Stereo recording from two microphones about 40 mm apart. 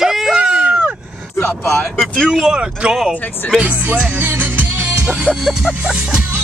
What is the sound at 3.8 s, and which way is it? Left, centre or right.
Music, right.